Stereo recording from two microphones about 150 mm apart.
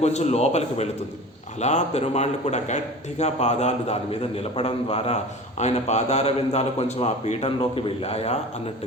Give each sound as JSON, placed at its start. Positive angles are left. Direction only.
{"t": 0.0, "sound": "speech", "side_deg": 45}